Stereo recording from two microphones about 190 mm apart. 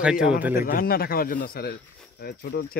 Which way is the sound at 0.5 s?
50° left (ahead or behind).